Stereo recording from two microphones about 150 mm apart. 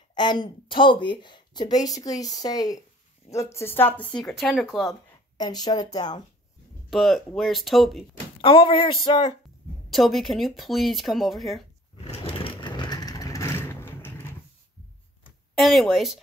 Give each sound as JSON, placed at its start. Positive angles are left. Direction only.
{"t": 0.1, "sound": "a woman's voice", "side_deg": 30}
{"t": 5.4, "sound": "speech", "side_deg": 25}
{"t": 6.9, "sound": "speech", "side_deg": 0}
{"t": 8.4, "sound": "speech", "side_deg": 35}
{"t": 9.8, "sound": "speech", "side_deg": 0}
{"t": 12.0, "sound": "vehicle", "side_deg": 40}
{"t": 15.5, "sound": "speech", "side_deg": 0}